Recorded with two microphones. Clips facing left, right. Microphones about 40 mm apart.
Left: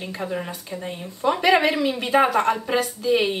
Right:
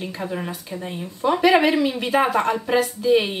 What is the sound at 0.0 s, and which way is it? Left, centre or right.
Speech, centre.